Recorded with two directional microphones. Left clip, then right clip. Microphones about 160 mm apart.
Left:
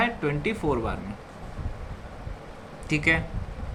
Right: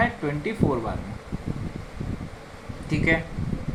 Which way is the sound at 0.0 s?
20° right (ahead or behind).